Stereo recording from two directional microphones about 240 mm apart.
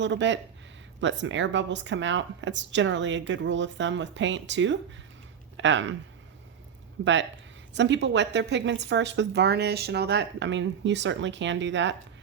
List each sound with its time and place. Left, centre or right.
0.0 s a woman's voice: right
7.0 s a woman's voice: right